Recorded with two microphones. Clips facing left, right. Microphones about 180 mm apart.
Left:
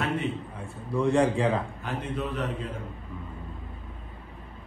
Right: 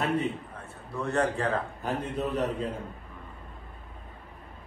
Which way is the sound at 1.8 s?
35° right (ahead or behind).